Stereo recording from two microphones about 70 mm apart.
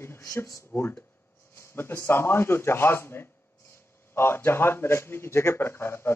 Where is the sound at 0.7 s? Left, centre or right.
Left.